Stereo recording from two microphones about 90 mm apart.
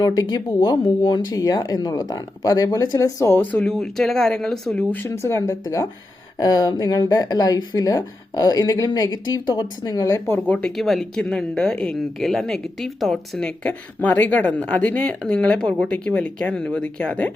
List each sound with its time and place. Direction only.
0.0 s speech: 45° left (ahead or behind)
3.3 s speech: 20° left (ahead or behind)
3.7 s speech: 5° left (ahead or behind)
5.0 s speech: 30° left (ahead or behind)
6.4 s speech: 45° left (ahead or behind)
10.8 s speech: centre (ahead or behind)